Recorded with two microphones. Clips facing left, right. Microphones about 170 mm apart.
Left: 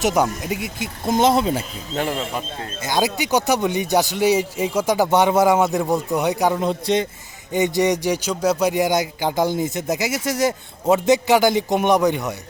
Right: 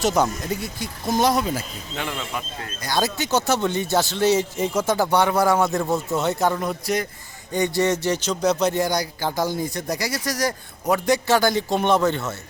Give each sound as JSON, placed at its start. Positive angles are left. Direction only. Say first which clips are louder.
{"t": 0.0, "sound": "speech", "louder": "left 1 dB", "side_deg": 15}
{"t": 2.0, "sound": "speech", "louder": "left 6 dB", "side_deg": 35}
{"t": 2.8, "sound": "speech", "louder": "left 3 dB", "side_deg": 15}
{"t": 6.7, "sound": "speech", "louder": "left 4 dB", "side_deg": 25}